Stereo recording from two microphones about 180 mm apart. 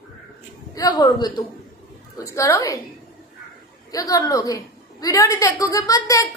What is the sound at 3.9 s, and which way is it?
A woman's voice, 20° left (ahead or behind).